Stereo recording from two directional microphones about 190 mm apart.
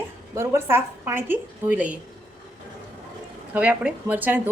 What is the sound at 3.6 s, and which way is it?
Speech, 5° right (ahead or behind).